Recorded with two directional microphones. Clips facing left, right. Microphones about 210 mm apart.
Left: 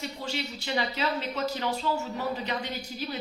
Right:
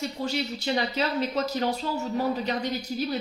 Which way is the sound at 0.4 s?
35° right (ahead or behind).